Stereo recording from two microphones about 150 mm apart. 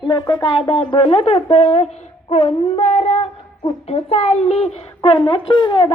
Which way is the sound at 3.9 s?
45° left (ahead or behind).